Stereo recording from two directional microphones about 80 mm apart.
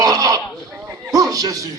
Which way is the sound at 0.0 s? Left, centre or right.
Right.